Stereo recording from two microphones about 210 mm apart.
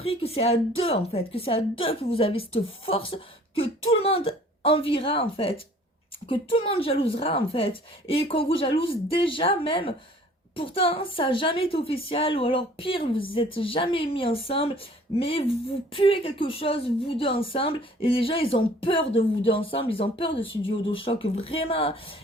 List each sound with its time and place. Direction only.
0.0 s a woman's voice: 30° left (ahead or behind)